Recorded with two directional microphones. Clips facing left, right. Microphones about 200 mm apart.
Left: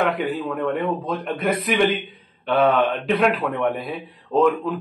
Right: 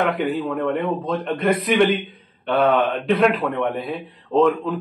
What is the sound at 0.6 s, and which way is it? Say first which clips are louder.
A man's voice: right 1 dB; centre (ahead or behind).